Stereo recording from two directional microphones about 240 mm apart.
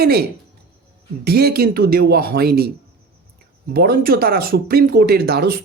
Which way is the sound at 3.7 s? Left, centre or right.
Right.